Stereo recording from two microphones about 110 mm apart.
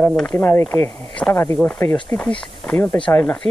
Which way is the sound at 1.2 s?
10° left (ahead or behind).